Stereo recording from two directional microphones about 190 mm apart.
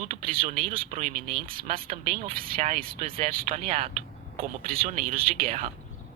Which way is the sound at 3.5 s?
40° right (ahead or behind).